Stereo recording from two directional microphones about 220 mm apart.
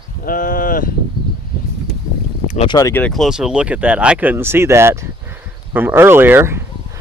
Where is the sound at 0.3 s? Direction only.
40° left (ahead or behind).